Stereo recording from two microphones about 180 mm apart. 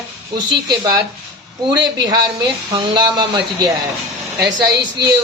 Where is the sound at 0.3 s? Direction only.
25° right (ahead or behind).